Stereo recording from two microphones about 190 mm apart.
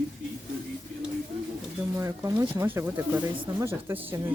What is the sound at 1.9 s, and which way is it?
Speech, 15° right (ahead or behind).